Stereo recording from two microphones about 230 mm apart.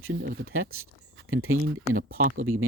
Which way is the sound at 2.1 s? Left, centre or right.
Right.